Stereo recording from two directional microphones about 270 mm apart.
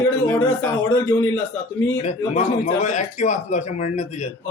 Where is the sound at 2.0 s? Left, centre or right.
Left.